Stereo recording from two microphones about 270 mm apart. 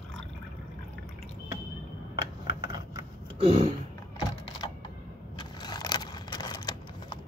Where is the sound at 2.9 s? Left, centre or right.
Centre.